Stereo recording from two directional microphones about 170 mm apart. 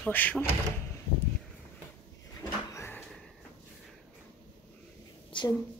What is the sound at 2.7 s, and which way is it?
Cupboard open or close, 15° left (ahead or behind).